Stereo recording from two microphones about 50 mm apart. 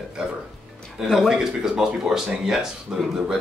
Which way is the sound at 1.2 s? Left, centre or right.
Centre.